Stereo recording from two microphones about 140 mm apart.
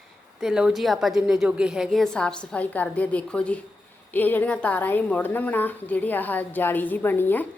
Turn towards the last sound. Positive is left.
turn(degrees=15)  # may be behind; listen again after turning